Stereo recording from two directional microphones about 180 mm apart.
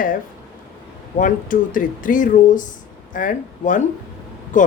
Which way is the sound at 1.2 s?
50° left (ahead or behind).